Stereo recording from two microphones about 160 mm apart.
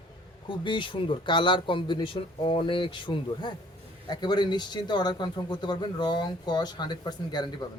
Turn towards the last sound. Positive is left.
turn(degrees=25)  # may be behind; listen again after turning